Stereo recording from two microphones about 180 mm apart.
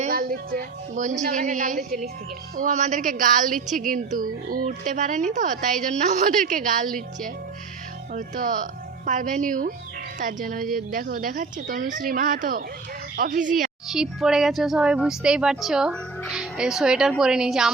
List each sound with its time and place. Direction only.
0.1 s a woman's voice: 55° right (ahead or behind)
13.8 s speech: centre (ahead or behind)